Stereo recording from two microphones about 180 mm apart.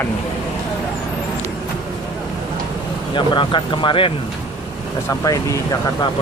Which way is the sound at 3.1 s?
25° left (ahead or behind).